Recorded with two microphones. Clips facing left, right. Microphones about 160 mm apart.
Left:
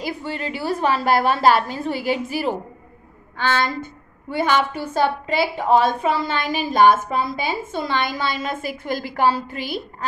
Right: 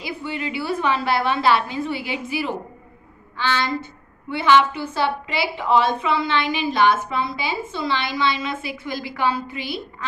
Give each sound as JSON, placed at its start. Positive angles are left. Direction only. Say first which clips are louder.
{"t": 0.0, "sound": "a woman's voice", "louder": "left 1 dB", "side_deg": 40}